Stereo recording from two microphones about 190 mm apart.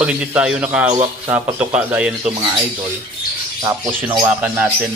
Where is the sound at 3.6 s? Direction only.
15° right (ahead or behind).